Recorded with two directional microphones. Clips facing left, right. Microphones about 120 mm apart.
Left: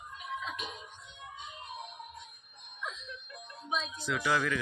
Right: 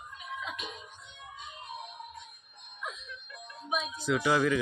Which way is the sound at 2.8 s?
5° right (ahead or behind).